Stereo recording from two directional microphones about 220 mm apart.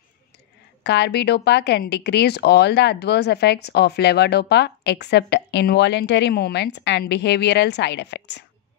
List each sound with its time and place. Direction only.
0.8 s speech: 50° left (ahead or behind)